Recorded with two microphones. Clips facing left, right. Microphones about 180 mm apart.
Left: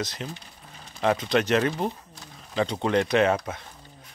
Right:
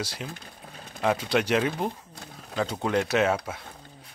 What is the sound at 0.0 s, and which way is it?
Speech, 10° right (ahead or behind).